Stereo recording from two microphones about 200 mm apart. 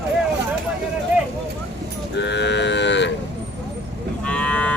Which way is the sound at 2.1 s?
60° left (ahead or behind).